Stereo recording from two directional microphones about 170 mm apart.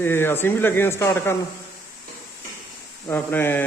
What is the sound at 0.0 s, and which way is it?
Speech, 15° left (ahead or behind).